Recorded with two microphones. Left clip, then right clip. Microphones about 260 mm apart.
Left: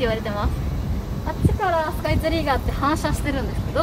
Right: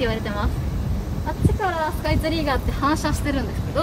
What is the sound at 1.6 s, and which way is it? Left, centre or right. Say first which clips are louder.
Speech: left 3 dB; left.